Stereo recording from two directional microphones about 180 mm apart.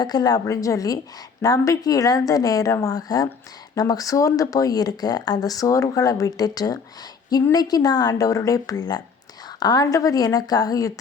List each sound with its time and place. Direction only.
0.0 s speech: 20° left (ahead or behind)